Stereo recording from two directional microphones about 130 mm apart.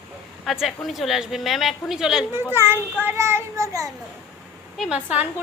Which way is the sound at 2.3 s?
20° right (ahead or behind).